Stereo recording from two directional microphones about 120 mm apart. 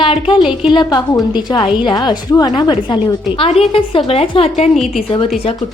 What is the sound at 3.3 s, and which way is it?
A woman's voice, 55° left (ahead or behind).